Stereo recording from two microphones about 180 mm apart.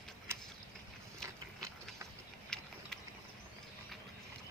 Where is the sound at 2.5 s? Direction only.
5° left (ahead or behind).